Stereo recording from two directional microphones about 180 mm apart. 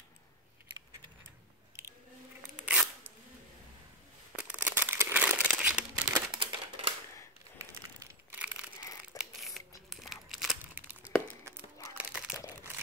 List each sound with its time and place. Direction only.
2.5 s scissors: 5° right (ahead or behind)
4.4 s crumpling: 5° right (ahead or behind)
6.3 s a sound: 25° right (ahead or behind)
7.5 s a sound: 10° right (ahead or behind)
9.2 s scissors: centre (ahead or behind)
10.0 s crumpling: centre (ahead or behind)